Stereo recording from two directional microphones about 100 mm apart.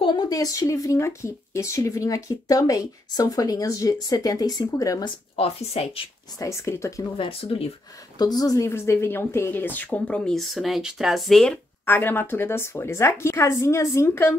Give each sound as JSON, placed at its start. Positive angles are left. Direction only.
{"t": 0.0, "sound": "speech", "side_deg": 45}
{"t": 5.3, "sound": "a woman's voice", "side_deg": 85}
{"t": 6.4, "sound": "a woman's voice", "side_deg": 30}
{"t": 7.2, "sound": "a woman's voice", "side_deg": 70}
{"t": 8.2, "sound": "speech", "side_deg": 40}
{"t": 8.6, "sound": "speech", "side_deg": 25}
{"t": 11.8, "sound": "a woman's voice", "side_deg": 20}